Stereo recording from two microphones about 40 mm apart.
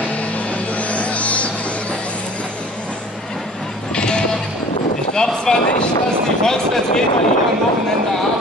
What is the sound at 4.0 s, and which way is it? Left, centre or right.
Music, left.